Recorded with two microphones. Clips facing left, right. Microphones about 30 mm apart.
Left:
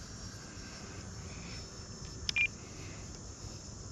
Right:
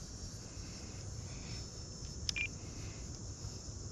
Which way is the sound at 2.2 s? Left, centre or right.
Left.